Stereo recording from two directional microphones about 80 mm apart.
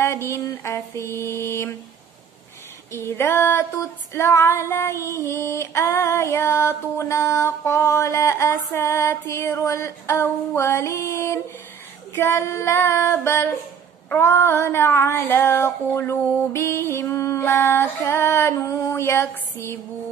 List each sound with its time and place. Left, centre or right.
0.0 s female singing: left
2.9 s female singing: left